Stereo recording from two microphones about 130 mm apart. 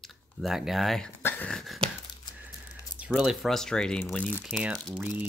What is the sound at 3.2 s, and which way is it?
Speech, centre (ahead or behind).